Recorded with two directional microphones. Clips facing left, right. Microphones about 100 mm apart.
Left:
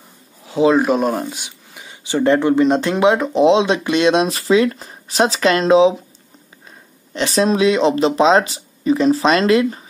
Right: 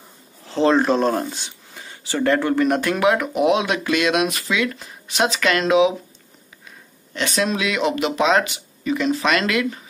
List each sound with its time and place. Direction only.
0.5 s speech: 10° left (ahead or behind); by 5.9 s 30° left (ahead or behind)
7.2 s speech: 35° left (ahead or behind)